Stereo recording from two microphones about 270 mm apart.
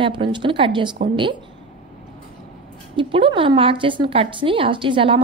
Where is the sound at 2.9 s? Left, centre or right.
Centre.